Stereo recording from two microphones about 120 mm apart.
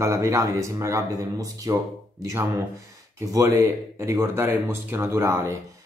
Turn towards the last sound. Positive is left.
turn(degrees=-20)  # may be behind; listen again after turning